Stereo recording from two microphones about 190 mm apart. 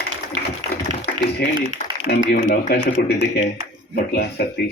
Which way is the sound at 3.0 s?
55° left (ahead or behind).